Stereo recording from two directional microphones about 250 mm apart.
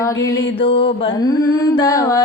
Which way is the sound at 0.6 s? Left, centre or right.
Left.